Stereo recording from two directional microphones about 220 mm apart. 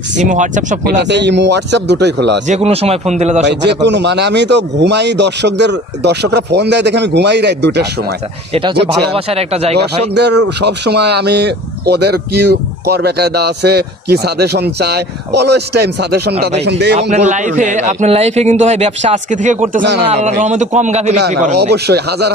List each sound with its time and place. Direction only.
0.2 s a man's voice: 35° right (ahead or behind)
0.9 s speech: 50° right (ahead or behind)
2.4 s a man's voice: 30° right (ahead or behind)
3.4 s speech: 50° right (ahead or behind)
8.5 s speech: 25° right (ahead or behind)
10.1 s speech: 50° right (ahead or behind)
17.1 s a man's voice: 35° right (ahead or behind)
19.8 s speech: 50° right (ahead or behind)
20.1 s a man's voice: 30° right (ahead or behind)
21.5 s speech: 50° right (ahead or behind)